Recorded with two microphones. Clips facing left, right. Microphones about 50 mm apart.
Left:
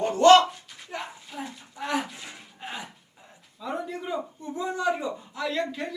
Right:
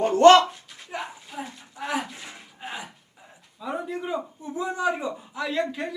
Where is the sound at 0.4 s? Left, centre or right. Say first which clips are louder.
Even; centre.